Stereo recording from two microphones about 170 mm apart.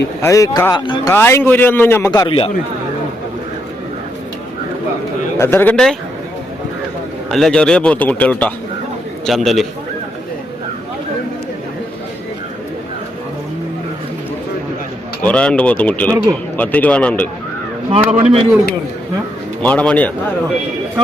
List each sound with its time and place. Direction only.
0.2 s a man's voice: 20° left (ahead or behind)
2.0 s speech: 25° left (ahead or behind)
5.4 s a man's voice: 10° left (ahead or behind)
7.3 s a man's voice: centre (ahead or behind)
15.2 s a man's voice: 5° left (ahead or behind)
18.2 s a man's voice: 35° right (ahead or behind)
19.6 s a man's voice: 5° left (ahead or behind)